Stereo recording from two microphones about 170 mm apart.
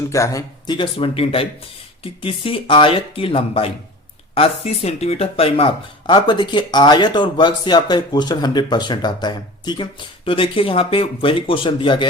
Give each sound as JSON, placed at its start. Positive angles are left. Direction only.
{"t": 0.1, "sound": "speech", "side_deg": 20}